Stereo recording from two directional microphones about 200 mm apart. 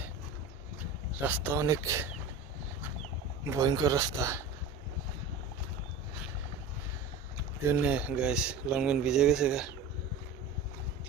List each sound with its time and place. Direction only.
1.1 s speech: 10° right (ahead or behind)
3.5 s speech: 15° right (ahead or behind)
7.7 s speech: 5° right (ahead or behind)